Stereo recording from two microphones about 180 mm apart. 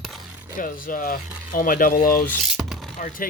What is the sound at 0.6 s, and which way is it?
Speech, 50° left (ahead or behind).